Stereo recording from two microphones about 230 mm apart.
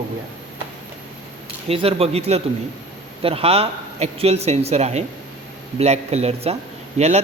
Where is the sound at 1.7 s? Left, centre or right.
Right.